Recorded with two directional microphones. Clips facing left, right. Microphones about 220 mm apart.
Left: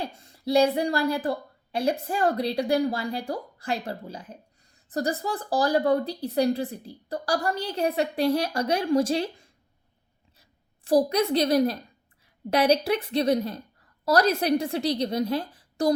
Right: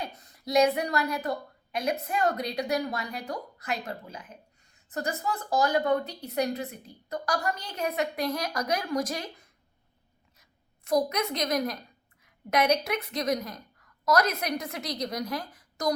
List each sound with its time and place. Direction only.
0.0 s a woman's voice: 30° left (ahead or behind)
10.8 s a woman's voice: 30° left (ahead or behind)